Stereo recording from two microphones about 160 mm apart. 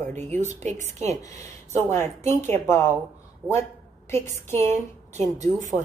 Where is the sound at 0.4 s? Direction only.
50° right (ahead or behind).